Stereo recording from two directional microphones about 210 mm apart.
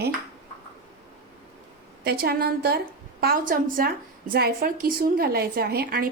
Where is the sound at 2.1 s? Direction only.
50° right (ahead or behind).